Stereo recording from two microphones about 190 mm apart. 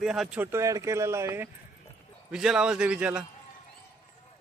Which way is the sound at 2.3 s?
5° right (ahead or behind).